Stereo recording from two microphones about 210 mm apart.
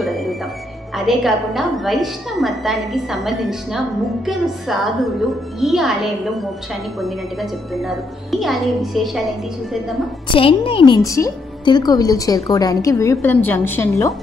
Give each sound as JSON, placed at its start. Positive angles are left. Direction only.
{"t": 0.0, "sound": "music", "side_deg": 0}
{"t": 0.9, "sound": "a woman's voice", "side_deg": 0}
{"t": 10.3, "sound": "a woman's voice", "side_deg": 25}